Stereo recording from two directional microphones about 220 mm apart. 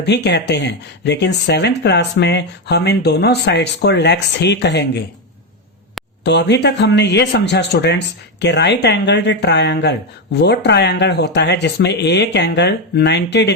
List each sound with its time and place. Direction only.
0.0 s speech: 50° left (ahead or behind)
6.2 s speech: 50° left (ahead or behind)